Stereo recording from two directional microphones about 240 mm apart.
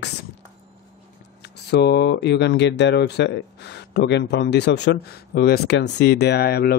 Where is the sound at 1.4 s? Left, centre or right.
Left.